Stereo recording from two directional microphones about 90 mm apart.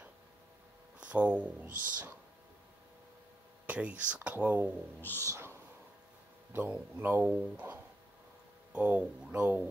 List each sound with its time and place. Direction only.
0.9 s speech: 15° right (ahead or behind)
3.6 s speech: 15° right (ahead or behind)
5.2 s speech: 30° right (ahead or behind)
6.5 s speech: 15° right (ahead or behind)